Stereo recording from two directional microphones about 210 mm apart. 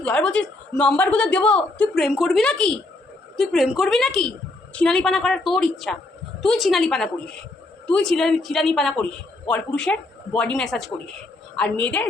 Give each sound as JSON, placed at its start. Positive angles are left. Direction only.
{"t": 0.0, "sound": "a woman's voice", "side_deg": 5}